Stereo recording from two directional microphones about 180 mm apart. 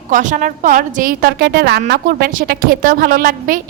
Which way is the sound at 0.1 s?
45° right (ahead or behind).